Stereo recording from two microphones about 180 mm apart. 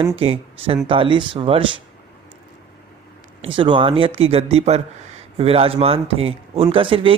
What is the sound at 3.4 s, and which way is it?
Speech, 25° right (ahead or behind).